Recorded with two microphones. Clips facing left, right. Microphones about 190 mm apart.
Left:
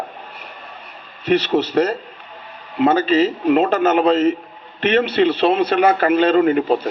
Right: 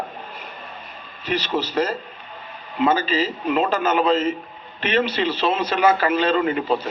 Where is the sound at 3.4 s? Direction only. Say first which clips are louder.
Left 6 dB; 50° left (ahead or behind).